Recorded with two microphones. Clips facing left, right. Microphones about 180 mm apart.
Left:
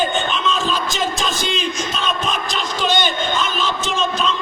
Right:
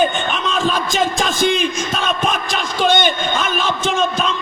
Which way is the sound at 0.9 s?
50° right (ahead or behind).